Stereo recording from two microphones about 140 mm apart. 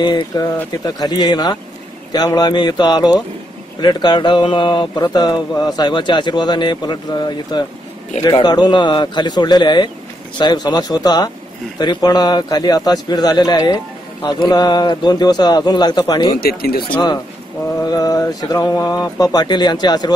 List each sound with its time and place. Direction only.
0.0 s speech: 30° left (ahead or behind)
16.3 s speech: 90° left
17.8 s speech: 25° left (ahead or behind)